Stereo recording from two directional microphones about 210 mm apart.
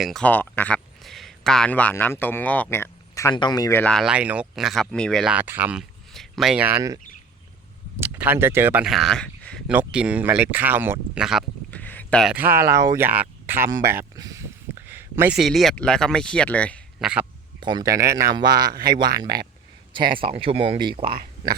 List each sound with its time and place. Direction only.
0.0 s a man's voice: 5° left (ahead or behind)
11.8 s a sound: 5° left (ahead or behind)
12.3 s speech: 10° right (ahead or behind); by 17.1 s 5° left (ahead or behind)
17.6 s speech: 20° right (ahead or behind)